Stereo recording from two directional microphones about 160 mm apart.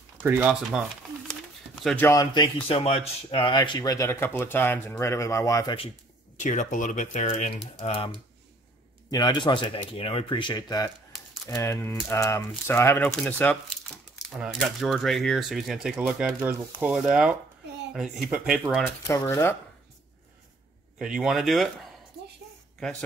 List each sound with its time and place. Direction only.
0.2 s speech: 15° right (ahead or behind)
0.7 s a sound: centre (ahead or behind)
1.8 s speech: 5° left (ahead or behind)
2.0 s speech: 25° left (ahead or behind)
6.4 s speech: 50° left (ahead or behind)
7.8 s speech: 35° left (ahead or behind); by 18.6 s 5° right (ahead or behind)
19.0 s speech: 20° left (ahead or behind)
21.0 s speech: 5° right (ahead or behind)
22.8 s speech: 5° left (ahead or behind)